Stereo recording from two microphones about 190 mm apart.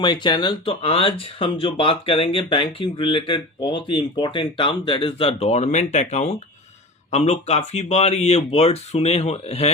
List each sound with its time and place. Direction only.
0.0 s speech: 25° left (ahead or behind)